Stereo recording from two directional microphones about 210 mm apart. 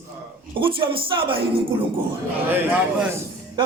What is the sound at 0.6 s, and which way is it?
Speech, 25° right (ahead or behind).